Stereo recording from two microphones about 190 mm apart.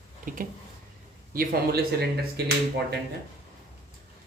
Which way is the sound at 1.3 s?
50° right (ahead or behind).